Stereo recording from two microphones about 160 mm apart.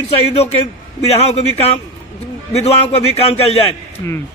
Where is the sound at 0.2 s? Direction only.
40° left (ahead or behind).